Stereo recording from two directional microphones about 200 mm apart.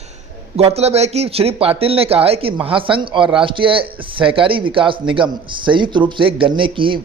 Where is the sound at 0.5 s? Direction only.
30° right (ahead or behind).